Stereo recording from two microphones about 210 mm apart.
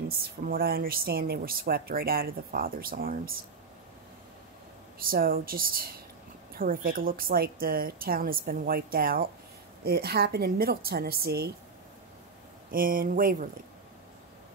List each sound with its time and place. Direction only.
0.5 s speech: 45° right (ahead or behind)
4.9 s speech: 45° right (ahead or behind)
12.7 s speech: 40° right (ahead or behind)